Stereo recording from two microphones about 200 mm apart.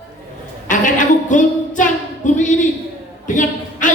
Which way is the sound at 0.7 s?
40° left (ahead or behind).